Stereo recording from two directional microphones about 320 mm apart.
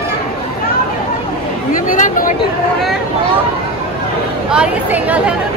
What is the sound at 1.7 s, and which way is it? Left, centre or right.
Speech, left.